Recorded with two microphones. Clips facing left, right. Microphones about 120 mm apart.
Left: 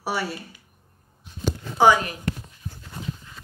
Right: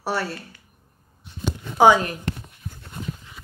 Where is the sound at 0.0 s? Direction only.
5° left (ahead or behind).